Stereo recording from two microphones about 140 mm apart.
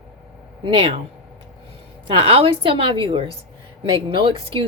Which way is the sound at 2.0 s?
45° right (ahead or behind).